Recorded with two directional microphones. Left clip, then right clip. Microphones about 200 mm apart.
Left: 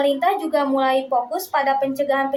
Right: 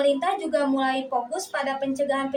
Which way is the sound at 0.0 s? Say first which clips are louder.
Left 4 dB; 15° left (ahead or behind).